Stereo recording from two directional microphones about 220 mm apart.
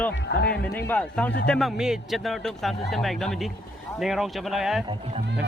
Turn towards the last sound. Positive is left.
turn(degrees=0)  # may be behind; listen again after turning